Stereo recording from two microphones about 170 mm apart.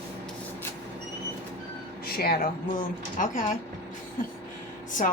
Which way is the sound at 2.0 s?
65° left (ahead or behind).